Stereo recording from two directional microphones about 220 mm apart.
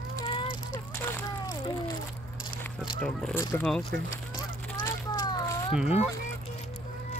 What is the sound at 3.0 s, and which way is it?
Speech, 5° left (ahead or behind).